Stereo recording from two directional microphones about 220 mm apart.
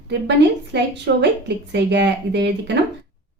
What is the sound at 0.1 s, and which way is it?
A woman's voice, 50° right (ahead or behind).